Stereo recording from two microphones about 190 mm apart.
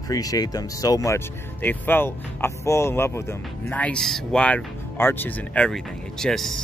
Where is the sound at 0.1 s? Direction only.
20° left (ahead or behind).